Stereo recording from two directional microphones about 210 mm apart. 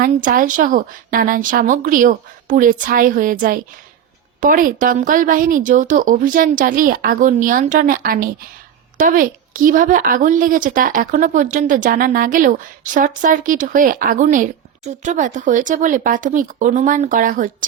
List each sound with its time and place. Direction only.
0.0 s a woman's voice: 40° right (ahead or behind)